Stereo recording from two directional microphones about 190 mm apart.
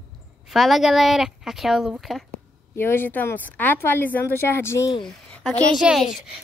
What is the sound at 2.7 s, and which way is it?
Speech, 10° left (ahead or behind).